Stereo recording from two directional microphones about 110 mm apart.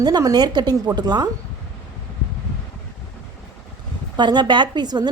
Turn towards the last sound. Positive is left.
turn(degrees=-40)  # may be behind; listen again after turning